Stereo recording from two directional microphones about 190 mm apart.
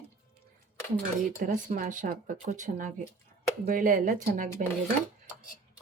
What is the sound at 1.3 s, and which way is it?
Speech, 45° right (ahead or behind).